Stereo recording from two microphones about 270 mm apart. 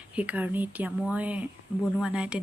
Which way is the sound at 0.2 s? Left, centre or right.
Centre.